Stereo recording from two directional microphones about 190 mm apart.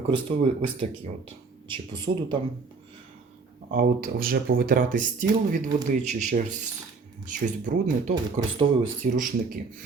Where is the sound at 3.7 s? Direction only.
50° right (ahead or behind).